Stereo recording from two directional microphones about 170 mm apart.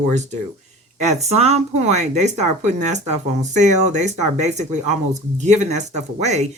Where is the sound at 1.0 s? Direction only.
40° right (ahead or behind).